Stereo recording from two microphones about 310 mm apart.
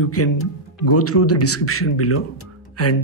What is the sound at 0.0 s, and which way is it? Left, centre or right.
Speech, left.